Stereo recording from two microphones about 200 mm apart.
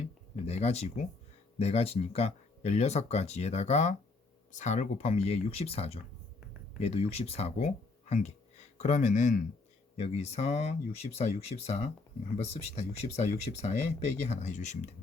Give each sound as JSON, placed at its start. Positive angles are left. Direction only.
{"t": 0.0, "sound": "speech", "side_deg": 35}